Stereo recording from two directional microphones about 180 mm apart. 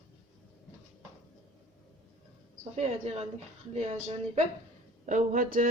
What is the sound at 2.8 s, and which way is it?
A woman's voice, 35° right (ahead or behind).